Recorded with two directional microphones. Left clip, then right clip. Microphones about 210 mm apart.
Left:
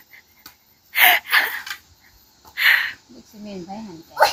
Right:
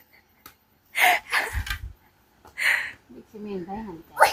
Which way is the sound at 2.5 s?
5° right (ahead or behind).